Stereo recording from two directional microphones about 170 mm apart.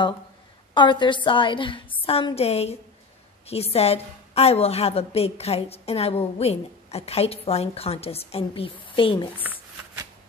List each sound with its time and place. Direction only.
0.7 s a woman's voice: 25° left (ahead or behind)